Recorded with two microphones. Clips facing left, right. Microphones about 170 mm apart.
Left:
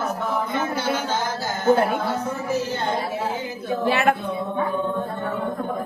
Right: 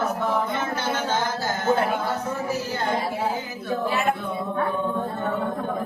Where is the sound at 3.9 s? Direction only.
70° left (ahead or behind).